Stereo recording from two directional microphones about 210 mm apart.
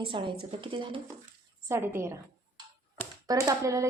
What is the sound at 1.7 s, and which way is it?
Speech, 10° right (ahead or behind).